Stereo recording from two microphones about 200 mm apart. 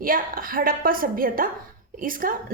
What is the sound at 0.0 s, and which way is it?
A woman's voice, 45° right (ahead or behind).